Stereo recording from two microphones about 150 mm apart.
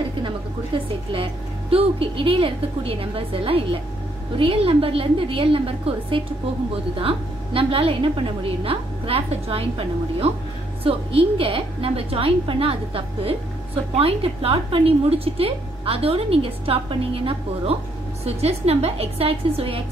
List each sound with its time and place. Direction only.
1.1 s a woman's voice: 40° right (ahead or behind)